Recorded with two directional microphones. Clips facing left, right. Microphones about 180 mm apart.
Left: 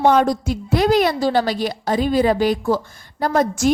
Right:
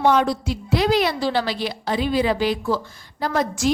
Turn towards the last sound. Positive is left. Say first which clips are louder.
# left 4 dB
turn(degrees=45)  # may be behind; listen again after turning